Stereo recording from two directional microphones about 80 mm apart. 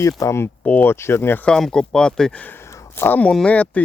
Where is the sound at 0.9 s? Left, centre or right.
Left.